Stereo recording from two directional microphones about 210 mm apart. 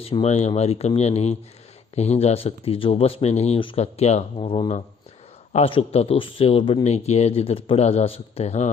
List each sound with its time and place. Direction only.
0.0 s speech: 30° left (ahead or behind)